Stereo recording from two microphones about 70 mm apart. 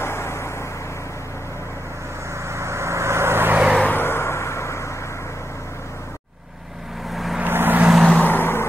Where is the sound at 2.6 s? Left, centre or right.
Right.